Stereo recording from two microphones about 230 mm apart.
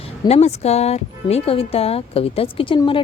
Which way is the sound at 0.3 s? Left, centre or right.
Left.